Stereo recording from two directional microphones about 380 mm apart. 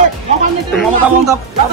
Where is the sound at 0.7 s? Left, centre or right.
Centre.